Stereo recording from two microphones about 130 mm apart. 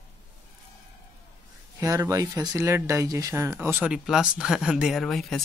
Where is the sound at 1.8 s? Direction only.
25° right (ahead or behind).